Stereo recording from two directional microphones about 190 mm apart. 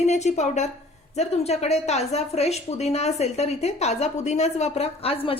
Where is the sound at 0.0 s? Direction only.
35° left (ahead or behind).